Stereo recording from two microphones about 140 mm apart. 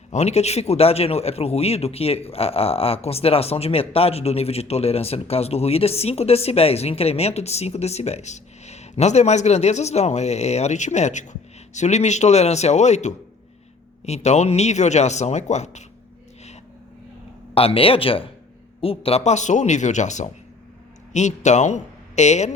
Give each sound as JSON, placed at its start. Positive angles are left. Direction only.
{"t": 0.1, "sound": "speech", "side_deg": 50}
{"t": 17.5, "sound": "a man's voice", "side_deg": 40}